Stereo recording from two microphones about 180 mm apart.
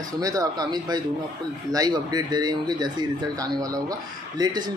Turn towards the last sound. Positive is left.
turn(degrees=-20)  # may be behind; listen again after turning